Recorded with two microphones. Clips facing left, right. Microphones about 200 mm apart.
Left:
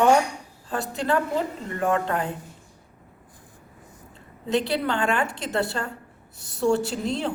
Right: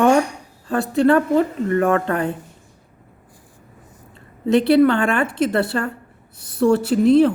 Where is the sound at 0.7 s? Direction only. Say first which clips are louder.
Right 9 dB; 60° right (ahead or behind).